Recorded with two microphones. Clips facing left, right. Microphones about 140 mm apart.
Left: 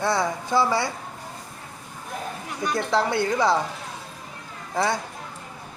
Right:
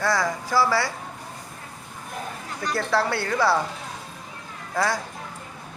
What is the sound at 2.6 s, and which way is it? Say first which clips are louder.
Speech: left 1 dB; 20° left (ahead or behind).